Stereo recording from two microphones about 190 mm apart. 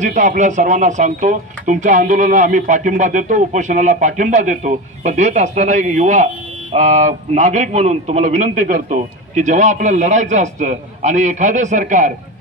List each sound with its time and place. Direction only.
0.0 s speech: 40° right (ahead or behind)